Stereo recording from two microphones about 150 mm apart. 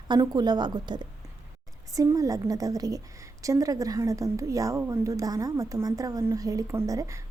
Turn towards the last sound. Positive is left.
turn(degrees=-20)  # may be behind; listen again after turning